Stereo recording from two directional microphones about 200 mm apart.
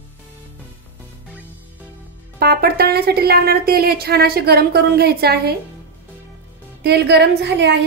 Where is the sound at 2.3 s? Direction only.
50° right (ahead or behind).